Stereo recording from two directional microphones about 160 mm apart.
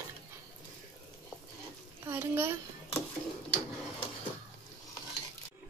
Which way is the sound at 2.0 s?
15° right (ahead or behind).